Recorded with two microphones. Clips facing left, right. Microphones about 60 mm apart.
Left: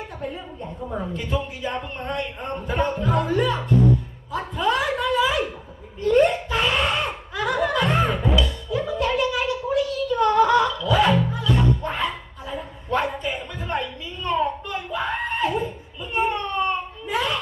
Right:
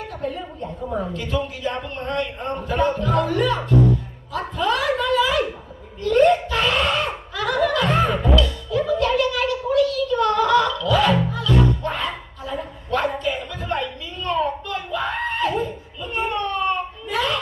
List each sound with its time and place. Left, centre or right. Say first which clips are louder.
0.2 s chatter: right 5 dB; centre
1.1 s speech: right 2 dB; centre
4.3 s a sound: right 1 dB; centre
7.3 s music: right 2 dB; centre
8.9 s a sound: right 3 dB; centre
11.3 s music: right 2 dB; centre